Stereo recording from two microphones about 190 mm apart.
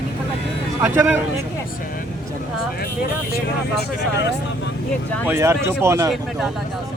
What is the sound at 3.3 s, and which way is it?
Speech, 60° left (ahead or behind).